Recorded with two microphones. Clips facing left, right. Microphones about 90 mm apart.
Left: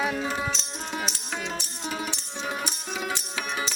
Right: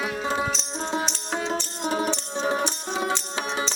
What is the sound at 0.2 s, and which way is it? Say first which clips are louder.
Music: right 3 dB; 25° right (ahead or behind).